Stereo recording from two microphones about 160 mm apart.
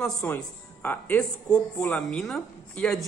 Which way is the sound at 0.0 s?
10° left (ahead or behind).